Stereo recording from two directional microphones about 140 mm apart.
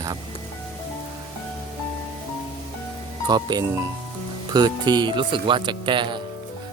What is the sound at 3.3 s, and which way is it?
Speech, 30° right (ahead or behind).